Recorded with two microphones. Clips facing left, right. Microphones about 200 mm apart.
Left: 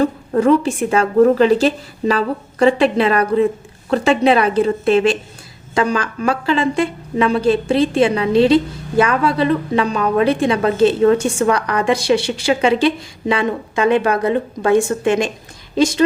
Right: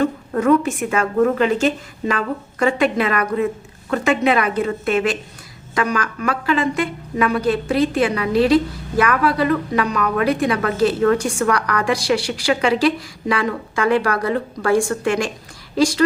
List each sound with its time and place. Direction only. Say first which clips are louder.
0.0 s a woman's voice: left 3 dB; 30° left (ahead or behind)